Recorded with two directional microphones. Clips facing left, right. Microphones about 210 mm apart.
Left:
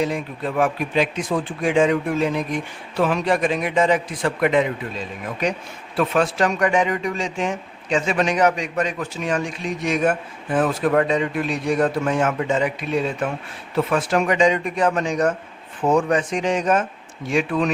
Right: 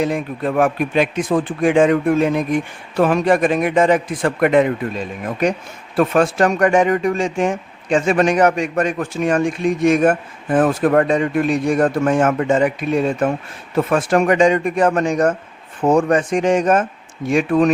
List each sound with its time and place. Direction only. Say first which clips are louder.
0.0 s speech: right 4 dB; 50° right (ahead or behind)